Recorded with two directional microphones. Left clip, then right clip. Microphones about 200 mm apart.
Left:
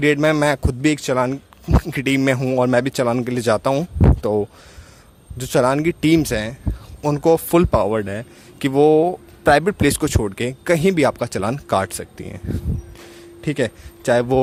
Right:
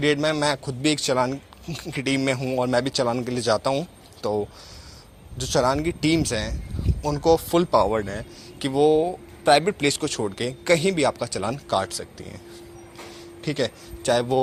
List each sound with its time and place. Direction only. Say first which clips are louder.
0.0 s a man's voice: left 5 dB; 40° left (ahead or behind)